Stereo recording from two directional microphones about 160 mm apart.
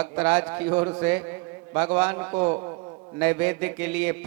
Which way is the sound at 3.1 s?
10° right (ahead or behind).